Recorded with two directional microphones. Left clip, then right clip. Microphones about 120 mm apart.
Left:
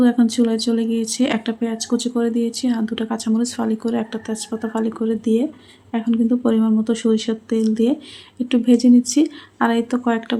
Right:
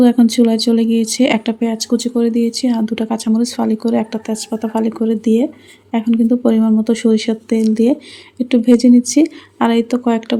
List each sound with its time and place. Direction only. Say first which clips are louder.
0.0 s speech: right 5 dB; 40° right (ahead or behind)